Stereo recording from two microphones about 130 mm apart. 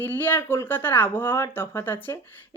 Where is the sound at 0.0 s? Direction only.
15° left (ahead or behind).